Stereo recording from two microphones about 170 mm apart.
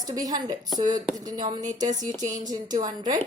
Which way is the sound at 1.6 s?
45° right (ahead or behind).